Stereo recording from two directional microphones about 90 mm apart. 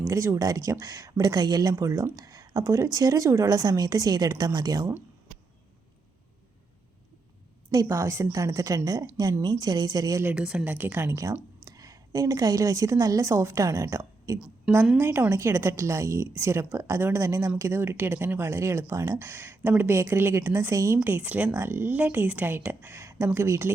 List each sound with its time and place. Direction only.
0.1 s a woman's voice: 35° right (ahead or behind)
7.7 s a woman's voice: 35° right (ahead or behind)
10.3 s speech: 10° right (ahead or behind)
10.7 s speech: 20° right (ahead or behind)
11.6 s a woman's voice: 45° right (ahead or behind)
14.3 s a woman's voice: 10° right (ahead or behind)
14.9 s a woman's voice: 25° right (ahead or behind)
21.0 s speech: 20° right (ahead or behind)